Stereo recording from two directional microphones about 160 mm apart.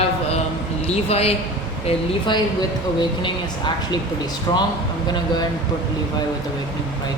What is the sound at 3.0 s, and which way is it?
Speech, 30° left (ahead or behind).